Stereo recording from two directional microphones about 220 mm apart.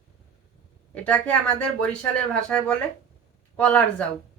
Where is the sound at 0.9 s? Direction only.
5° left (ahead or behind).